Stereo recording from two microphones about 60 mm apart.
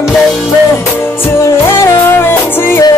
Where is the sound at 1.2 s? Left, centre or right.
Left.